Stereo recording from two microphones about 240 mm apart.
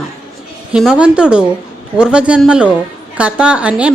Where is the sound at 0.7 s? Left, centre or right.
Centre.